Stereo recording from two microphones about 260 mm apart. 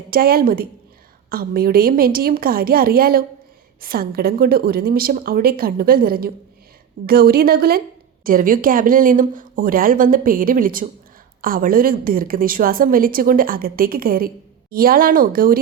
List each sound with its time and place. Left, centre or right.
0.1 s a woman's voice: right